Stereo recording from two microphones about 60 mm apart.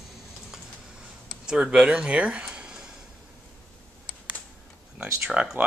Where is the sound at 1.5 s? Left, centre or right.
Centre.